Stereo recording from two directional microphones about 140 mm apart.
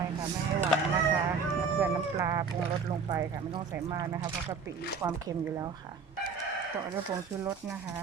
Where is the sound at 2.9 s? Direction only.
35° right (ahead or behind).